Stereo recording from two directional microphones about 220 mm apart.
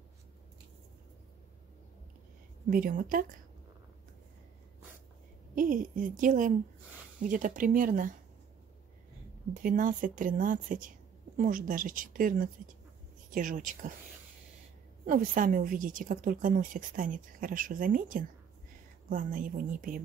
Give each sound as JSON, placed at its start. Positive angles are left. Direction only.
{"t": 2.7, "sound": "a woman's voice", "side_deg": -40}
{"t": 5.5, "sound": "a woman's voice", "side_deg": -40}
{"t": 9.5, "sound": "a woman's voice", "side_deg": -40}
{"t": 15.0, "sound": "a woman's voice", "side_deg": -40}